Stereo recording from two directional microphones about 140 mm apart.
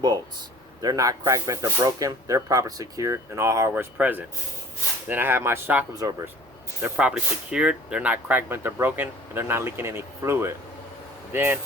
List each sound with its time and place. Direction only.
0.8 s speech: 25° right (ahead or behind)
5.9 s speech: 25° right (ahead or behind)
6.8 s speech: 10° right (ahead or behind)